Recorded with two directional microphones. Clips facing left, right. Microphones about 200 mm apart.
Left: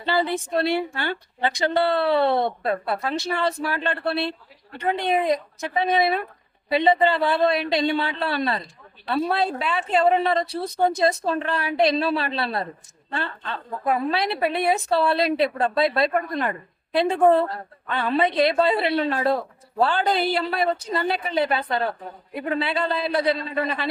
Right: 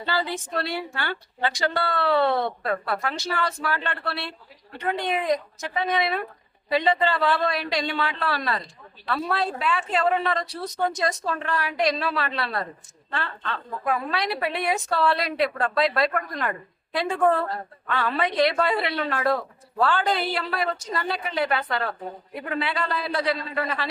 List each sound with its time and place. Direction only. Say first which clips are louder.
0.5 s a woman's voice: left 7 dB; 25° left (ahead or behind)